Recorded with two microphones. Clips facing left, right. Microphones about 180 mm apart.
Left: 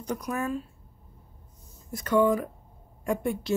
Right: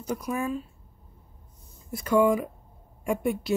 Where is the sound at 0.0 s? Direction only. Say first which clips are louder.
Right 1 dB; 10° right (ahead or behind).